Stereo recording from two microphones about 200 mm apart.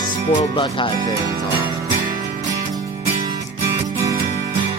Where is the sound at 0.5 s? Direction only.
25° left (ahead or behind).